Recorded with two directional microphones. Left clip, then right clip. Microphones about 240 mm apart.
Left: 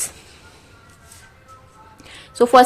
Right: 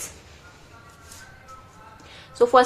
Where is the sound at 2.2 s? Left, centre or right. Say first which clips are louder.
Left 5 dB; left.